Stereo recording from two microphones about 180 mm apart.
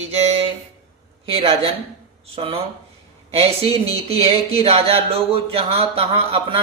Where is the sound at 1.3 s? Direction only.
30° right (ahead or behind).